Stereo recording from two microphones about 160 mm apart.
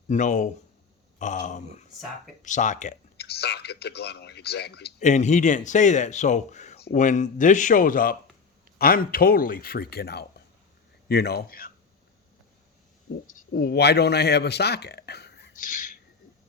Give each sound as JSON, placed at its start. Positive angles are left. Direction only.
{"t": 0.1, "sound": "speech", "side_deg": 50}
{"t": 3.2, "sound": "speech", "side_deg": 90}
{"t": 4.9, "sound": "speech", "side_deg": 45}
{"t": 13.5, "sound": "speech", "side_deg": 80}